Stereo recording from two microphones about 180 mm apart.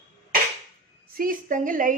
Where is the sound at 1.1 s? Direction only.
50° right (ahead or behind).